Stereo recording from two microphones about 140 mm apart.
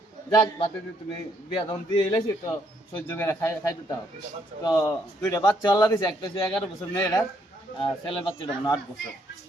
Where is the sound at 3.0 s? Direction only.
15° left (ahead or behind).